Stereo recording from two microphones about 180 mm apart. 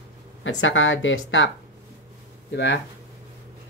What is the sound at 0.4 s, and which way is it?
Speech, 90° left.